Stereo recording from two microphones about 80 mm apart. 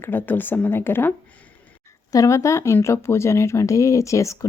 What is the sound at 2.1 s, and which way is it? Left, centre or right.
A woman's voice, left.